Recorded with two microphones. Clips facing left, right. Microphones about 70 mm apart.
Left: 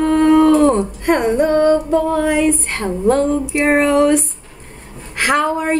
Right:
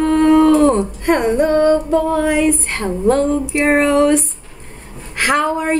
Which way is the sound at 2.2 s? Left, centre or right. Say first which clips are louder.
Even; centre.